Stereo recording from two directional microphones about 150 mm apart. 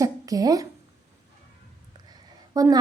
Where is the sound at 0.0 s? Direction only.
25° right (ahead or behind).